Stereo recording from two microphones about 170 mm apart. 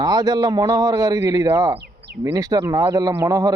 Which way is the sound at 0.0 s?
25° right (ahead or behind).